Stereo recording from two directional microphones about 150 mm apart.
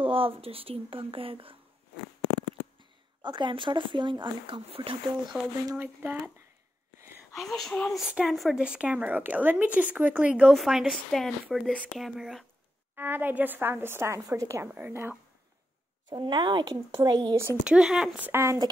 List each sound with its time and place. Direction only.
0.0 s speech: 40° right (ahead or behind)
3.2 s speech: 30° right (ahead or behind)
5.8 s a woman's voice: 15° right (ahead or behind)
7.3 s speech: centre (ahead or behind)
12.9 s a woman's voice: 15° right (ahead or behind)
16.1 s speech: 30° right (ahead or behind)
17.6 s a woman's voice: 5° right (ahead or behind)